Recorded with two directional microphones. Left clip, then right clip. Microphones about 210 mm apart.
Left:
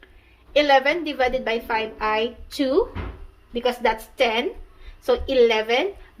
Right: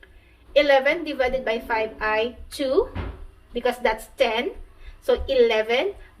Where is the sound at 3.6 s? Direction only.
45° left (ahead or behind).